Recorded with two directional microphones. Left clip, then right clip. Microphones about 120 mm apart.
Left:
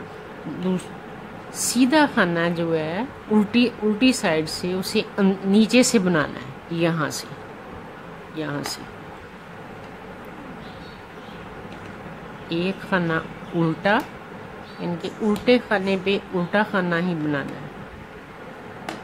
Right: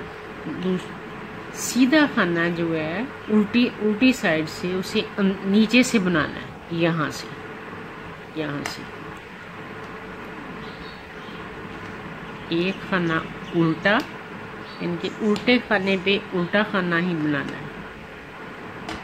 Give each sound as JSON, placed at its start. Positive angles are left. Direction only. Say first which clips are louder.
{"t": 1.6, "sound": "speech", "louder": "even", "side_deg": 50}
{"t": 12.4, "sound": "speech", "louder": "right 1 dB", "side_deg": 50}
{"t": 13.6, "sound": "speech", "louder": "right 1 dB", "side_deg": 30}
{"t": 14.8, "sound": "speech", "louder": "even", "side_deg": 40}